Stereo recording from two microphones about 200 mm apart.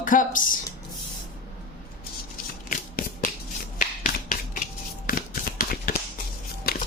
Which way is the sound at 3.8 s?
45° left (ahead or behind).